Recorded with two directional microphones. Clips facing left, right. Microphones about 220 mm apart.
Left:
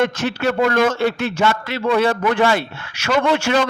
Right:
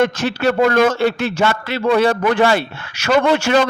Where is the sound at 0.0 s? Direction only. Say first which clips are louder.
Right 2 dB; 35° right (ahead or behind).